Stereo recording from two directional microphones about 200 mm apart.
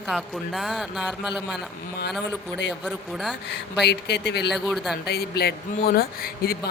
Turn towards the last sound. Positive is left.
turn(degrees=50)  # may be behind; listen again after turning